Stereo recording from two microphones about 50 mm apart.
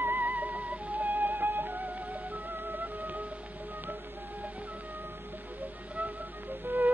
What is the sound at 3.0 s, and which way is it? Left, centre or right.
Music, right.